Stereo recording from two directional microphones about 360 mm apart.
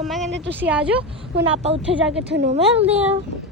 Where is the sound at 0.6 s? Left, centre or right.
Centre.